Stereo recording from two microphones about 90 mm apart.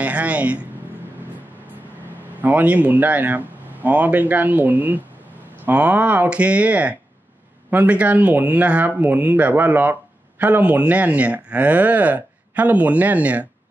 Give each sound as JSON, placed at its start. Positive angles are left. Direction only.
{"t": 0.0, "sound": "speech", "side_deg": -15}
{"t": 2.4, "sound": "speech", "side_deg": -15}